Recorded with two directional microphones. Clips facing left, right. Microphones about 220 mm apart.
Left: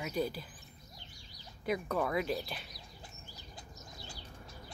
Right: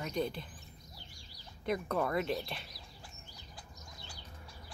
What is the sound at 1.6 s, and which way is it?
Speech, centre (ahead or behind).